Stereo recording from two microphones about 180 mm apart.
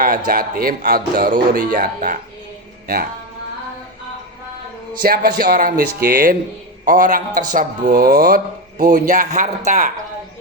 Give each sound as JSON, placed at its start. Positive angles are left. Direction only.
{"t": 0.0, "sound": "a man's voice", "side_deg": -50}
{"t": 2.8, "sound": "music", "side_deg": -55}
{"t": 5.0, "sound": "a man's voice", "side_deg": -55}